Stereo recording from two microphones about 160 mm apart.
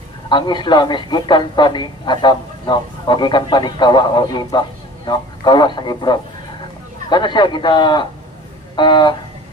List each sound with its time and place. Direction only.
0.3 s speech: 30° left (ahead or behind)